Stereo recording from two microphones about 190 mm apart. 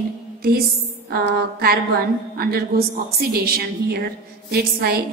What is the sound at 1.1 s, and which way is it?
A woman's voice, 55° right (ahead or behind).